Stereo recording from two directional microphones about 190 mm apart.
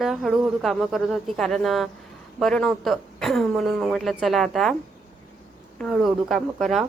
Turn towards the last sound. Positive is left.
turn(degrees=0)  # may be behind; listen again after turning